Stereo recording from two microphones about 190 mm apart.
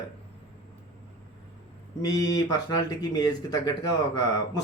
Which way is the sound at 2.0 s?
20° left (ahead or behind).